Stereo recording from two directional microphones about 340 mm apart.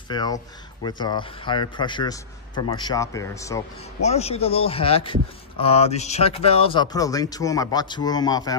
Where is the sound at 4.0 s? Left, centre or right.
Centre.